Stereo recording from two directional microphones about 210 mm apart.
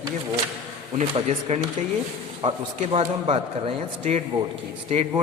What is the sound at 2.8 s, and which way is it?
A woman's voice, 30° right (ahead or behind).